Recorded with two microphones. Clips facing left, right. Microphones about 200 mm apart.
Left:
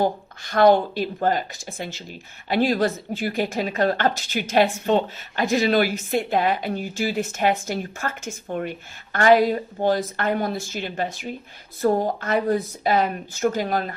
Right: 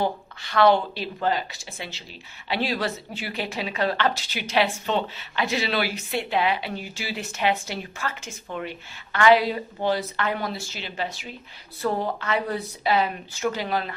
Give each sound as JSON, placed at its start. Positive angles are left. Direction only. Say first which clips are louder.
{"t": 0.0, "sound": "speech", "louder": "left 4 dB", "side_deg": 45}